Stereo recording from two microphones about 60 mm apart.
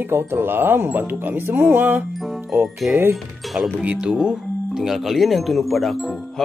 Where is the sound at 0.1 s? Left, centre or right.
Right.